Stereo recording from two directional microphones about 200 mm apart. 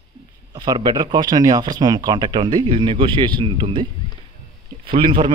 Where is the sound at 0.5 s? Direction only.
20° right (ahead or behind).